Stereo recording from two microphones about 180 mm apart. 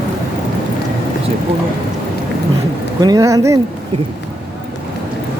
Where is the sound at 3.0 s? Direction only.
20° right (ahead or behind).